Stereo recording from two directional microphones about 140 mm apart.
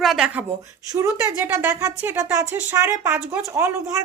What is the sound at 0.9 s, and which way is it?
A woman's voice, 20° right (ahead or behind).